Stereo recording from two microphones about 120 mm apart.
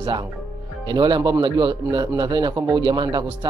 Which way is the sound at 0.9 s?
40° right (ahead or behind).